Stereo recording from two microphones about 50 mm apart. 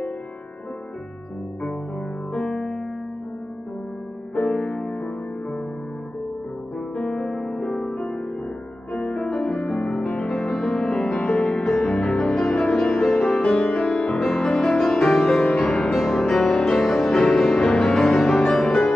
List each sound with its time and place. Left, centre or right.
2.3 s music: centre
4.4 s music: centre
7.0 s music: centre
16.8 s music: centre
17.1 s music: centre
18.0 s music: centre